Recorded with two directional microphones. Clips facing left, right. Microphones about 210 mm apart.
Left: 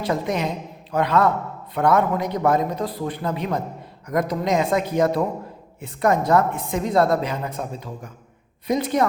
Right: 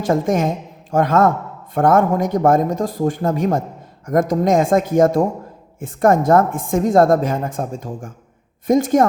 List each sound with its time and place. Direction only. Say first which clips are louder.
0.0 s speech: right 6 dB; 45° right (ahead or behind)